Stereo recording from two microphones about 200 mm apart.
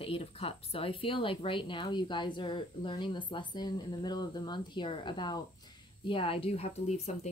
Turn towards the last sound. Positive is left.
turn(degrees=35)  # may be behind; listen again after turning